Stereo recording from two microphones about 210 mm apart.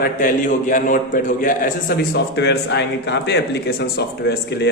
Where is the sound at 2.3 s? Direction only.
55° left (ahead or behind).